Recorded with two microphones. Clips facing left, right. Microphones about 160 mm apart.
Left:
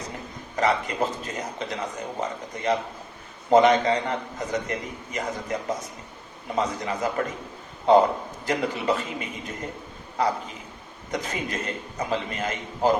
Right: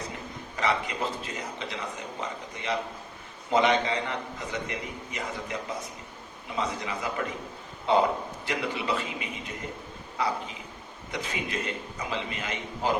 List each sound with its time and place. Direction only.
0.5 s a man's voice: 45° left (ahead or behind)
3.5 s a man's voice: 40° left (ahead or behind)